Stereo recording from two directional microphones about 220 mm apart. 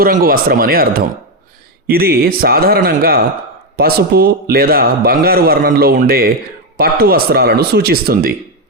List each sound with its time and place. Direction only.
0.0 s a man's voice: 40° right (ahead or behind)